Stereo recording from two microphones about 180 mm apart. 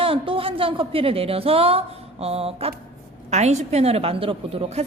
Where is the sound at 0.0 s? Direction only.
30° right (ahead or behind).